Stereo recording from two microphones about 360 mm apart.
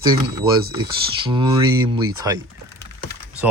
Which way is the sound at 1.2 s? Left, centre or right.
Centre.